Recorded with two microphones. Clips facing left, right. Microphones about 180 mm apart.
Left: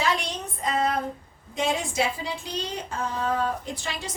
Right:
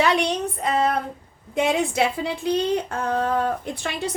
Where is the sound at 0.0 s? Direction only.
65° right (ahead or behind).